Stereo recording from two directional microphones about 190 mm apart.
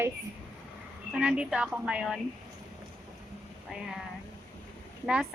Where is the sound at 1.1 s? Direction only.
5° right (ahead or behind).